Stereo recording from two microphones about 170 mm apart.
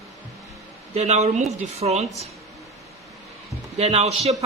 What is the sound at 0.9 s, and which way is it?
Speech, 40° right (ahead or behind).